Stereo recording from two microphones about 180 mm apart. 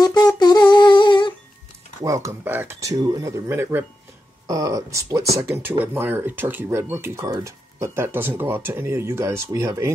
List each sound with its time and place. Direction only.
0.0 s humming: 20° left (ahead or behind)
2.0 s speech: 20° right (ahead or behind)